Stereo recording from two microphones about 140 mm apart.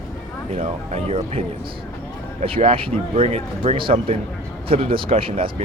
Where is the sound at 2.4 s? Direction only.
40° right (ahead or behind).